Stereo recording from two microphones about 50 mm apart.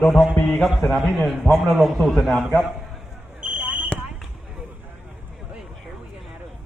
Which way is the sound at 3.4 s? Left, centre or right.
Right.